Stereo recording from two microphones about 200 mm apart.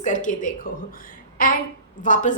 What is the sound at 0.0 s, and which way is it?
A woman's voice, 40° left (ahead or behind).